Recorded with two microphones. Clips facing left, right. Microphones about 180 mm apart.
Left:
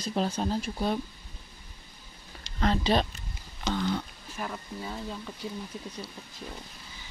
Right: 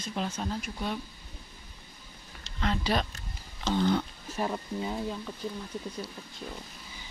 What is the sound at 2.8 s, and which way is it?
Speech, 25° left (ahead or behind).